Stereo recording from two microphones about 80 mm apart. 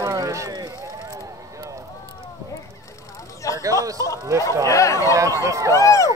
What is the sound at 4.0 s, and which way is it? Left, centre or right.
Speech, left.